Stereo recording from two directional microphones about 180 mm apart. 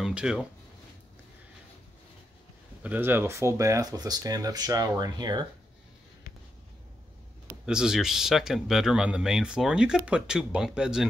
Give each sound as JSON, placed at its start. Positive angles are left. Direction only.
{"t": 0.0, "sound": "speech", "side_deg": -5}
{"t": 2.8, "sound": "speech", "side_deg": -10}
{"t": 7.6, "sound": "speech", "side_deg": -5}